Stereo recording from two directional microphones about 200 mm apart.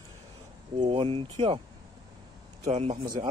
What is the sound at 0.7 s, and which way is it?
Speech, 25° right (ahead or behind).